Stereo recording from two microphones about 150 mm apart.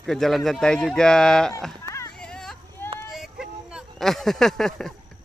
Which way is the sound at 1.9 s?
20° left (ahead or behind).